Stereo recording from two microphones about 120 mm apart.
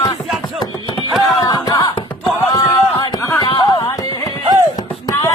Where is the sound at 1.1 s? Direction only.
Centre (ahead or behind).